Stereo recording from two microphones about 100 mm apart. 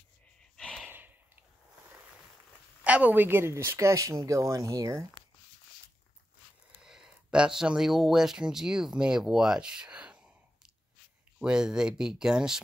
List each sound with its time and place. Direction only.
0.6 s snort: 5° left (ahead or behind)
0.8 s snort: 20° right (ahead or behind)
2.8 s speech: 15° right (ahead or behind); by 5.0 s 30° right (ahead or behind)
6.8 s speech: 5° right (ahead or behind)
11.3 s speech: 5° right (ahead or behind)